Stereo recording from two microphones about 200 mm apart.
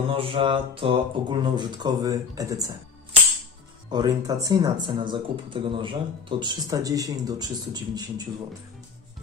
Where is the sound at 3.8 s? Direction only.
20° right (ahead or behind).